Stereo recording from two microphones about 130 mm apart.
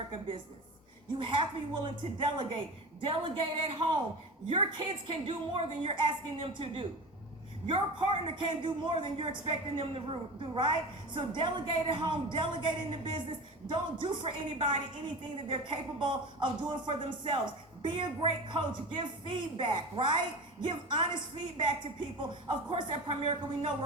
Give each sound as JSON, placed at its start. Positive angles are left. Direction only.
{"t": 1.2, "sound": "a woman's voice", "side_deg": -40}